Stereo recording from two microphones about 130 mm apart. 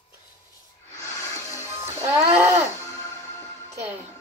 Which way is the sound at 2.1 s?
20° right (ahead or behind).